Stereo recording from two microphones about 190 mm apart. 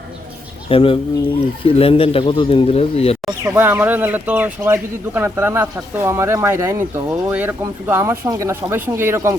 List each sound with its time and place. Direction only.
0.7 s speech: 30° left (ahead or behind)
3.2 s speech: 15° right (ahead or behind)